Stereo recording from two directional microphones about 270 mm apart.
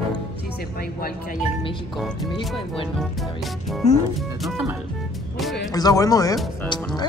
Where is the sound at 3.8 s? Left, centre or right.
Left.